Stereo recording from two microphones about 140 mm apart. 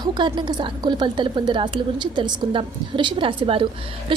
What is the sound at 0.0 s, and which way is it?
A woman's voice, 35° right (ahead or behind).